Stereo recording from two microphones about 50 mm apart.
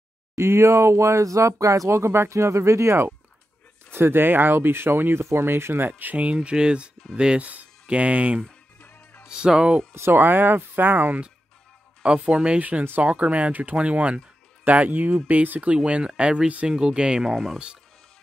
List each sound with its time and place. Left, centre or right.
0.4 s speech: right
3.9 s speech: right
6.3 s speech: centre
7.4 s speech: right
8.5 s music: left
9.3 s speech: centre
10.1 s speech: right
12.0 s speech: centre